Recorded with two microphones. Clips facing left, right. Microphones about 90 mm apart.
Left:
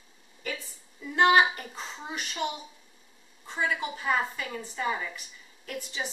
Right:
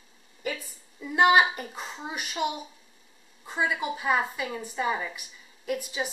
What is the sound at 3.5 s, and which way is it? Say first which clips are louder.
Speech: right 2 dB; 15° right (ahead or behind).